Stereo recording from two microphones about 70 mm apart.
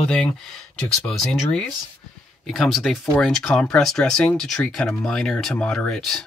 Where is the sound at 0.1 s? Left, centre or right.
Centre.